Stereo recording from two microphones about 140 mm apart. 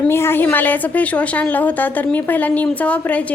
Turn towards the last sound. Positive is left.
turn(degrees=10)  # may be behind; listen again after turning